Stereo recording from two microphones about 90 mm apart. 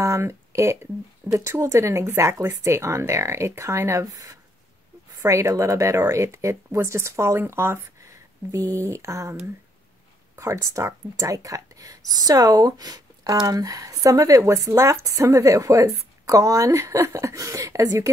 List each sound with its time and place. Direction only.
0.0 s speech: 30° right (ahead or behind)